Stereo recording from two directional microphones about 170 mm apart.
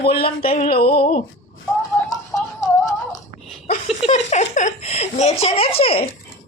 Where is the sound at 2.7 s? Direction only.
20° left (ahead or behind).